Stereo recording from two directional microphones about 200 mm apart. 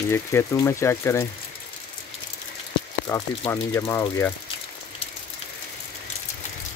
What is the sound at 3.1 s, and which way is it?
Speech, 15° left (ahead or behind).